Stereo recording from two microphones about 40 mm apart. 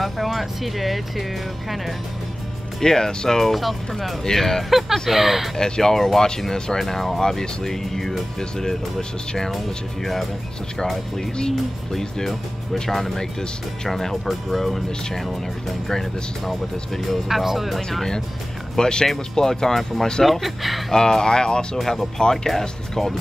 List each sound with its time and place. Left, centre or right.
0.0 s speech: centre
2.8 s speech: centre
3.3 s speech: centre
4.2 s speech: centre
4.6 s speech: centre
5.6 s speech: centre
11.9 s speech: centre
18.8 s speech: centre
20.9 s speech: centre
21.7 s speech: centre
22.2 s speech: centre